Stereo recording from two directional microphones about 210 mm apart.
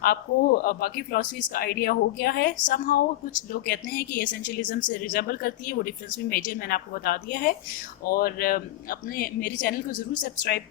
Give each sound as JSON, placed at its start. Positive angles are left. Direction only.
{"t": 0.0, "sound": "speech", "side_deg": 45}